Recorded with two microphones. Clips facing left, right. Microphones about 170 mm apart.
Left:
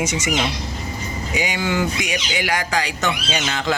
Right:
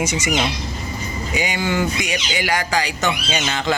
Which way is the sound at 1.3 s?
Centre (ahead or behind).